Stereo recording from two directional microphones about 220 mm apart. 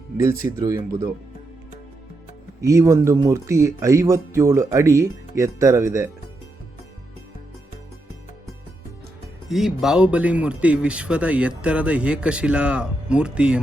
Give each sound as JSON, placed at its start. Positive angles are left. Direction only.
{"t": 0.6, "sound": "speech", "side_deg": -15}
{"t": 2.6, "sound": "speech", "side_deg": -15}
{"t": 9.5, "sound": "speech", "side_deg": 0}